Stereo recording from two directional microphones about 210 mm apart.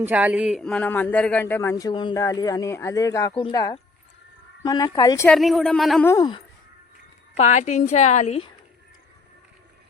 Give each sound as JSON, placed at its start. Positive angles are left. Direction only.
{"t": 0.0, "sound": "a man's voice", "side_deg": -5}
{"t": 5.3, "sound": "speech", "side_deg": 0}
{"t": 6.1, "sound": "speech", "side_deg": 20}
{"t": 7.3, "sound": "a woman's voice", "side_deg": 35}